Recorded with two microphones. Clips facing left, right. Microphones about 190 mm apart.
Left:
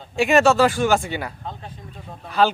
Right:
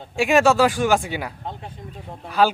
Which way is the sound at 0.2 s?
10° right (ahead or behind).